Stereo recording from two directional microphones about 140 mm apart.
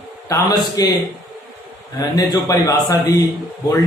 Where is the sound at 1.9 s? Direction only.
25° left (ahead or behind).